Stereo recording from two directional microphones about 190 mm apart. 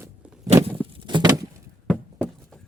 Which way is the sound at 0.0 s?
5° right (ahead or behind).